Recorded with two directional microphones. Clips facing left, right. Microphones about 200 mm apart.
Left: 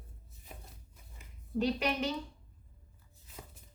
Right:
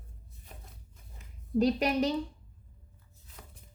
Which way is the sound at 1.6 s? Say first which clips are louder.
Right 5 dB; 40° right (ahead or behind).